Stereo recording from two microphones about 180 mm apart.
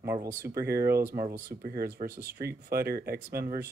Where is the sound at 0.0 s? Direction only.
15° right (ahead or behind).